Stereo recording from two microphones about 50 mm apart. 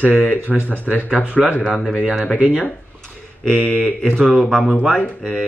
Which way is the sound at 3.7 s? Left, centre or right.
Left.